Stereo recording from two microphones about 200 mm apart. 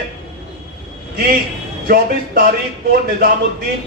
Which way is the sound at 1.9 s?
45° right (ahead or behind).